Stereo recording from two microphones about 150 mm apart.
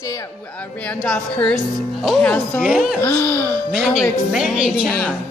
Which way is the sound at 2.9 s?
10° left (ahead or behind).